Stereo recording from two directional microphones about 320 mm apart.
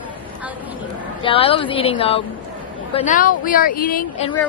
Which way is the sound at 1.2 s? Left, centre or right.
Centre.